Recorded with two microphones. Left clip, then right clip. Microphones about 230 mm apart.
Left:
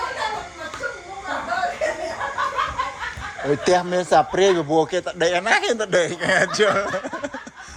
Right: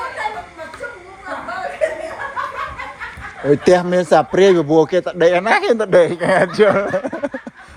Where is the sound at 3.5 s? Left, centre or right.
Right.